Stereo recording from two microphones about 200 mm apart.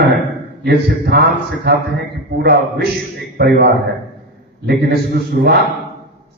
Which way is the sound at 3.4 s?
50° right (ahead or behind).